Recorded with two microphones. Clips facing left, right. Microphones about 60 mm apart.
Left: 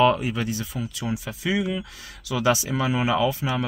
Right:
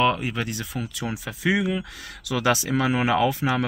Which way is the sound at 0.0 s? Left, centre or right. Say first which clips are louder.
Left 2 dB; right.